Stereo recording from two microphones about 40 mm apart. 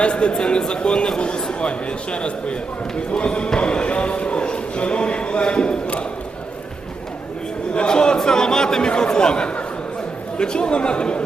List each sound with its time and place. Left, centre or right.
0.0 s a man's voice: left
7.7 s a man's voice: left